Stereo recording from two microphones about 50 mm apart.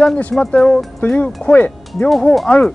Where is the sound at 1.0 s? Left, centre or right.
Left.